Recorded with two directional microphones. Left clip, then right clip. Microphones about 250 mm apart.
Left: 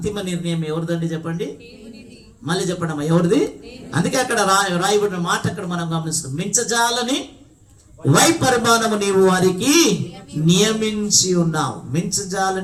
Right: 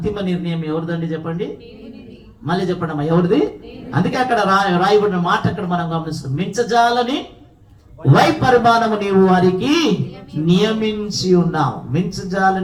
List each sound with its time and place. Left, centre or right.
0.0 s speech: left
2.5 s speech: left